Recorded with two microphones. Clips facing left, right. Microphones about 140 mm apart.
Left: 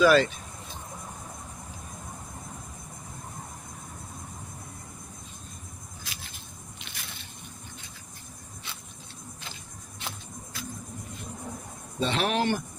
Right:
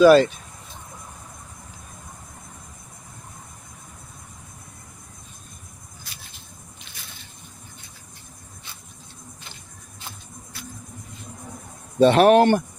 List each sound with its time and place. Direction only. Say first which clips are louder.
0.0 s speech: right 7 dB; 40° right (ahead or behind)
11.9 s speech: right 13 dB; 55° right (ahead or behind)